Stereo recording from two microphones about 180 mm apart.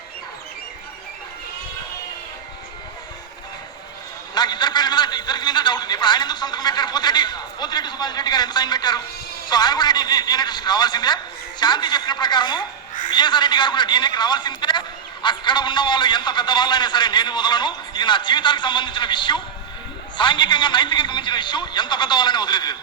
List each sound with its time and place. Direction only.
4.4 s a man's voice: 25° left (ahead or behind)